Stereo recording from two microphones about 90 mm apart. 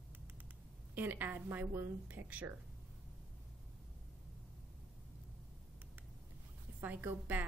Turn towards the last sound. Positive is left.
turn(degrees=-20)  # may be behind; listen again after turning